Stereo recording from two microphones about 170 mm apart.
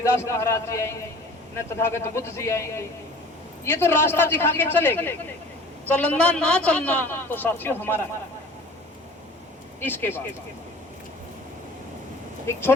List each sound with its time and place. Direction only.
0.0 s a man's voice: 15° left (ahead or behind)
9.8 s a man's voice: 10° left (ahead or behind)
12.5 s a man's voice: 15° left (ahead or behind)